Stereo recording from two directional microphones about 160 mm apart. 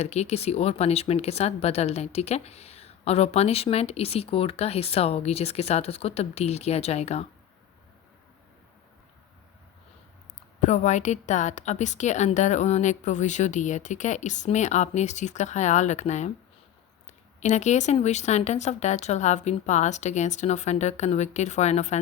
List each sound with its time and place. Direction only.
0.0 s speech: 40° left (ahead or behind)
10.6 s a woman's voice: 50° left (ahead or behind)
17.4 s a woman's voice: 45° left (ahead or behind)